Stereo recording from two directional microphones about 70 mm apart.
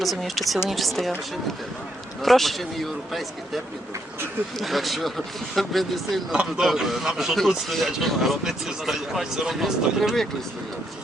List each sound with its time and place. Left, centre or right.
0.0 s speech: centre
2.2 s speech: centre
6.3 s speech: centre